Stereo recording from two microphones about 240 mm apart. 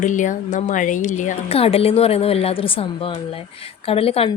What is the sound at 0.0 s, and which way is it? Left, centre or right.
Speech, left.